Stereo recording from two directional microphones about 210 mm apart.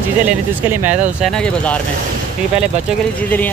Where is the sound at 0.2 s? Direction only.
10° right (ahead or behind).